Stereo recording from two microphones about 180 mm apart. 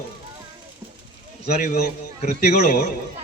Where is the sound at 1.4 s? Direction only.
40° left (ahead or behind).